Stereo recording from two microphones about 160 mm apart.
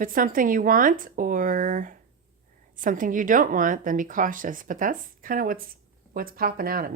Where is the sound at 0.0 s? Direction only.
60° right (ahead or behind).